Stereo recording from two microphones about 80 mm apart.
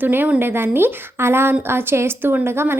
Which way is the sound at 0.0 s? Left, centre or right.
Right.